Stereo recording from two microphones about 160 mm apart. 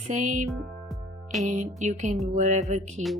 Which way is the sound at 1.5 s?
50° right (ahead or behind).